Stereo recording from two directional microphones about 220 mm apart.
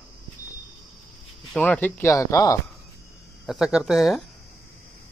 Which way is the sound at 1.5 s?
5° left (ahead or behind).